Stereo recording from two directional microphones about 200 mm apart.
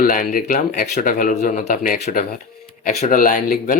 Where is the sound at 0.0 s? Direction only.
45° left (ahead or behind).